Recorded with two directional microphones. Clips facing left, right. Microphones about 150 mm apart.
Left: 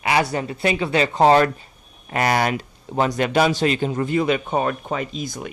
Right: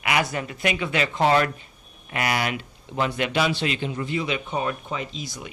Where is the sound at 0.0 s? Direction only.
30° left (ahead or behind).